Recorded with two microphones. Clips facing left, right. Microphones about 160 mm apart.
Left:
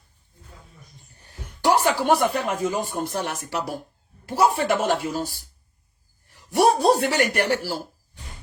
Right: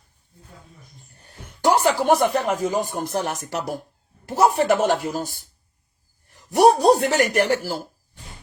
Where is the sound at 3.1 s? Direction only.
45° right (ahead or behind).